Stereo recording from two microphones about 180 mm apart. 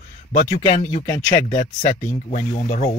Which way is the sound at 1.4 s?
35° left (ahead or behind).